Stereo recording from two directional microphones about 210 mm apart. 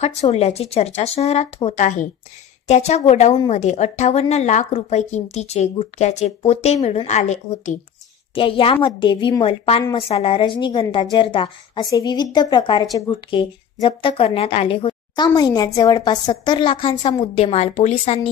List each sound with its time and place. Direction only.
0.0 s a woman's voice: 30° left (ahead or behind)